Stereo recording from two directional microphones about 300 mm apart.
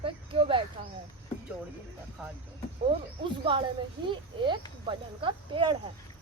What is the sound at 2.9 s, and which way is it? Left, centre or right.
Speech, centre.